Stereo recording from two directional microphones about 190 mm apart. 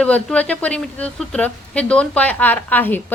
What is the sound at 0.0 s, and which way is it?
A woman's voice, 5° left (ahead or behind).